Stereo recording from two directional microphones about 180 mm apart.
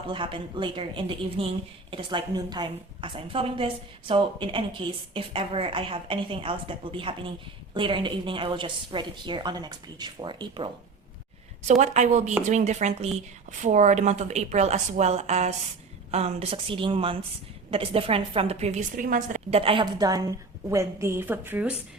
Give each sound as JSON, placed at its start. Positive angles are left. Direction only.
{"t": 0.1, "sound": "a woman's voice", "side_deg": -30}
{"t": 11.8, "sound": "a woman's voice", "side_deg": -40}
{"t": 19.5, "sound": "a woman's voice", "side_deg": -30}